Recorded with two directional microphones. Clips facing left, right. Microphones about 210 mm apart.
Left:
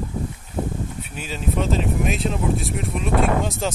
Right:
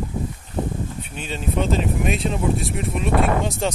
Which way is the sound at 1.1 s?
5° left (ahead or behind).